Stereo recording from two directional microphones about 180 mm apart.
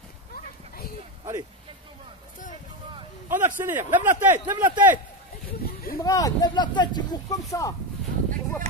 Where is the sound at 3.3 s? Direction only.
10° right (ahead or behind).